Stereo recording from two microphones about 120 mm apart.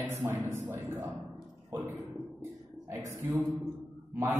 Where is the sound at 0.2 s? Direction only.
20° right (ahead or behind).